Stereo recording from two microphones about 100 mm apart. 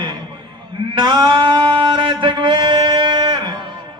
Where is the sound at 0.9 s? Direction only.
50° right (ahead or behind).